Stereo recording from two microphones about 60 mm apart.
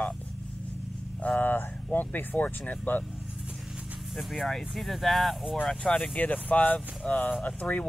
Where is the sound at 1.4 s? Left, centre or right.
Left.